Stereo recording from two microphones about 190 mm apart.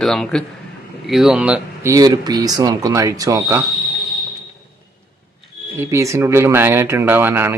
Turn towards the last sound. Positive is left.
turn(degrees=-10)  # may be behind; listen again after turning